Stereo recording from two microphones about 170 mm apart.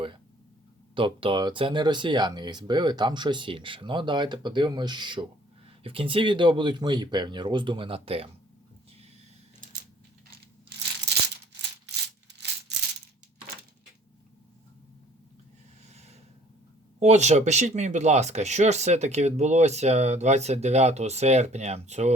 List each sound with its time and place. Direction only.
0.9 s speech: 30° right (ahead or behind)
15.9 s a sound: 40° right (ahead or behind)
17.0 s speech: 40° right (ahead or behind)